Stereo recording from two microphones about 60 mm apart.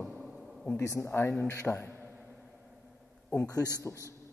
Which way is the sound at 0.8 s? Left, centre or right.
Left.